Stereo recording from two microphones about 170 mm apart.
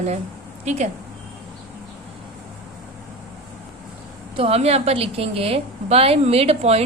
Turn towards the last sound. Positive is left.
turn(degrees=-40)  # may be behind; listen again after turning